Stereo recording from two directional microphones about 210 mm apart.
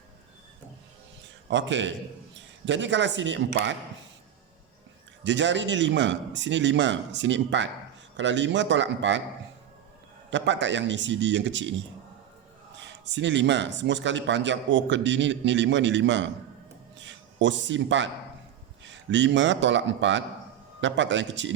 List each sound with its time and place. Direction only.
1.5 s speech: 60° right (ahead or behind)
5.2 s speech: 60° right (ahead or behind)
10.2 s speech: 60° right (ahead or behind)
12.7 s a man's voice: 60° right (ahead or behind)